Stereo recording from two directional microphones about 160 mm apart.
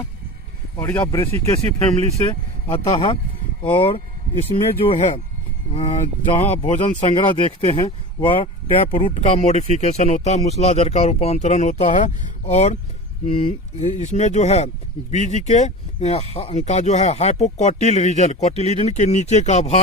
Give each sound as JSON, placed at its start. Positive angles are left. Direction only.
{"t": 0.8, "sound": "speech", "side_deg": 15}
{"t": 2.6, "sound": "speech", "side_deg": 30}